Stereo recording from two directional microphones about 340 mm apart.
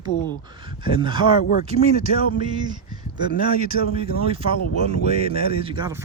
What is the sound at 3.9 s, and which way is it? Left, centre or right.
Speech, centre.